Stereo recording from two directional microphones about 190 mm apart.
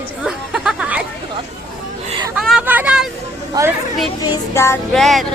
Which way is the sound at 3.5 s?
20° right (ahead or behind).